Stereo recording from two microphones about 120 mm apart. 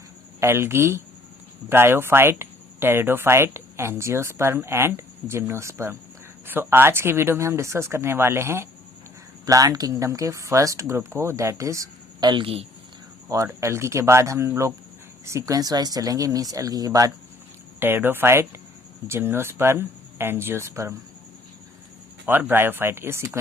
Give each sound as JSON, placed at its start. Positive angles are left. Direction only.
{"t": 0.3, "sound": "speech", "side_deg": -20}
{"t": 12.3, "sound": "speech", "side_deg": -50}
{"t": 13.2, "sound": "speech", "side_deg": -25}
{"t": 17.7, "sound": "speech", "side_deg": -20}
{"t": 22.3, "sound": "speech", "side_deg": -15}